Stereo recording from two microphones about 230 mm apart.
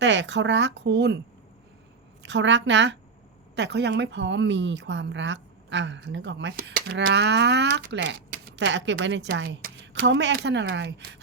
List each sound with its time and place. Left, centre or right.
0.0 s speech: right
2.2 s speech: right